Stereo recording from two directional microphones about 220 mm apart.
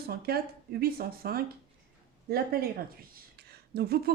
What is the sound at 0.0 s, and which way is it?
Speech, 45° right (ahead or behind).